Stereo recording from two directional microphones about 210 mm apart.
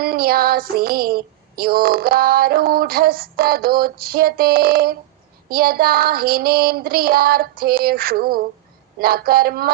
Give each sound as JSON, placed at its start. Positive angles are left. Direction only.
{"t": 0.0, "sound": "child singing", "side_deg": -45}